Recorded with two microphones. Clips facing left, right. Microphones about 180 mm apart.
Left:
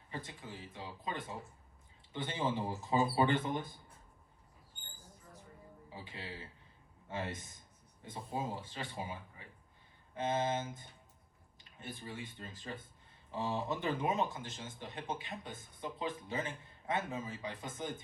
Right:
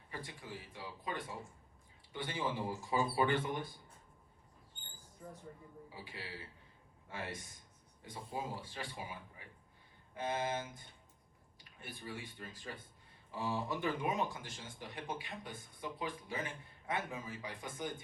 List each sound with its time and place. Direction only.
0.1 s a sound: 25° left (ahead or behind)
0.8 s speech: 20° left (ahead or behind)
5.9 s speech: 20° left (ahead or behind)
10.2 s speech: 20° left (ahead or behind)
11.8 s speech: 20° left (ahead or behind)